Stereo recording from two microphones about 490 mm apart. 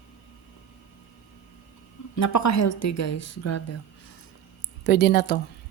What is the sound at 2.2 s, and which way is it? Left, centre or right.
Speech, left.